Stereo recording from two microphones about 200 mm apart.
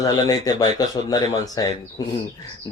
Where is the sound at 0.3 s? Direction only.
20° left (ahead or behind).